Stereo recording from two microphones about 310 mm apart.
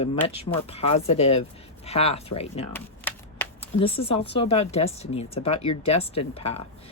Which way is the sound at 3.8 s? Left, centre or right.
Centre.